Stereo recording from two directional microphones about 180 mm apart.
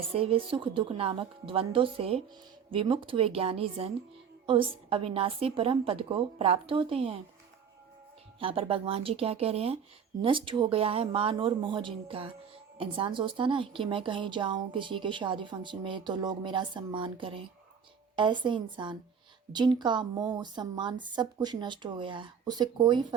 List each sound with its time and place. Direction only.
0.1 s a woman's voice: 30° right (ahead or behind)
8.4 s a woman's voice: 30° right (ahead or behind)